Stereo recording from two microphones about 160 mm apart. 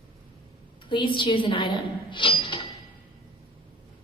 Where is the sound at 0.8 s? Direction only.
30° left (ahead or behind).